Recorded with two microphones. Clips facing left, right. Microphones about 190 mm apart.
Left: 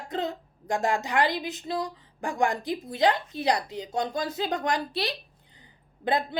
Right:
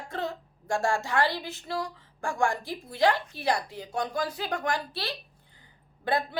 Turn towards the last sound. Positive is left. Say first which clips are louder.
# left 2 dB
turn(degrees=20)  # may be behind; listen again after turning